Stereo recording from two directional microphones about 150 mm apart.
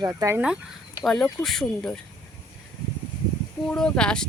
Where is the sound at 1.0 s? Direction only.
5° left (ahead or behind).